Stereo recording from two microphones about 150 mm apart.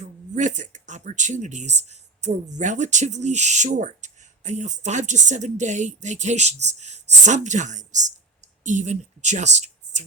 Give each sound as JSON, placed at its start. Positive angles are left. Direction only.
{"t": 0.3, "sound": "speech", "side_deg": -55}